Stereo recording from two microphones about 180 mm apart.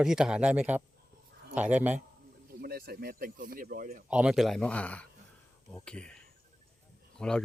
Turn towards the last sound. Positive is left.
turn(degrees=5)  # may be behind; listen again after turning